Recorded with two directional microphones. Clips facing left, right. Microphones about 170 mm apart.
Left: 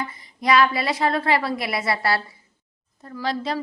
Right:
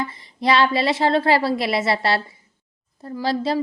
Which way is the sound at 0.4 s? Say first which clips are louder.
Right 1 dB; 30° right (ahead or behind).